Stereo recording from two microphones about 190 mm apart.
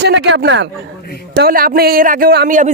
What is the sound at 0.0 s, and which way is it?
Speech, 65° right (ahead or behind).